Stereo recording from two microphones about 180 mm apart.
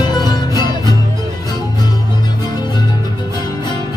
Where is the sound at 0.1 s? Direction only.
20° left (ahead or behind).